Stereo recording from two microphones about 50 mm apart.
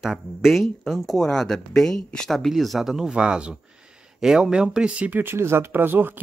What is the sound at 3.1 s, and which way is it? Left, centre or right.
Speech, right.